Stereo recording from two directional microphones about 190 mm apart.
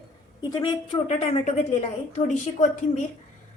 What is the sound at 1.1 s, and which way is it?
A woman's voice, 35° left (ahead or behind).